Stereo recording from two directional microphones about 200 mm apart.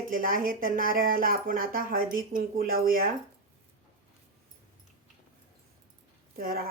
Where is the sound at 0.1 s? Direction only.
45° right (ahead or behind).